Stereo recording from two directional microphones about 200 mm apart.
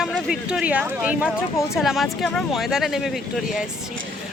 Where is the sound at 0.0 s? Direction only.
5° right (ahead or behind).